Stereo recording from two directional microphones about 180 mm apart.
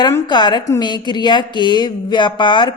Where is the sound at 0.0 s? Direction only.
25° left (ahead or behind).